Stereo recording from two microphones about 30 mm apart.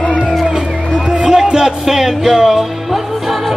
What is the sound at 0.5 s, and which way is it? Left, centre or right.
Music, centre.